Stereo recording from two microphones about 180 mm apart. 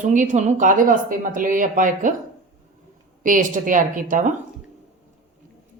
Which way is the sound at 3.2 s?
45° right (ahead or behind).